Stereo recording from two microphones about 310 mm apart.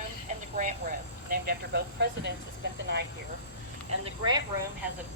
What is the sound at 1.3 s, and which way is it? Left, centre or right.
Speech, right.